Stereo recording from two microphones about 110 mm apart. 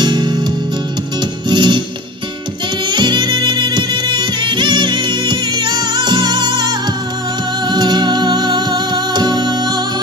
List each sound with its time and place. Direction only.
0.0 s music: 40° right (ahead or behind)
1.5 s music: 45° right (ahead or behind)
2.9 s music: 40° right (ahead or behind)